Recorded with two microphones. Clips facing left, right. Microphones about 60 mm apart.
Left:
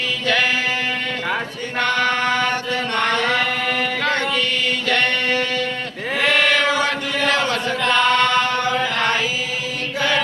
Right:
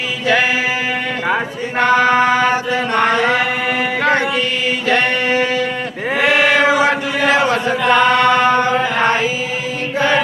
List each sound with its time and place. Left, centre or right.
1.8 s chant: centre
4.9 s a sound: centre
6.1 s chant: centre